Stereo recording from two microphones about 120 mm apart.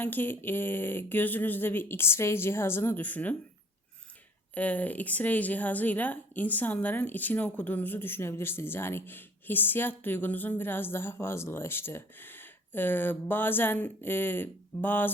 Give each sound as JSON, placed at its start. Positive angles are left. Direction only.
{"t": 0.0, "sound": "a woman's voice", "side_deg": 15}
{"t": 4.5, "sound": "a woman's voice", "side_deg": 15}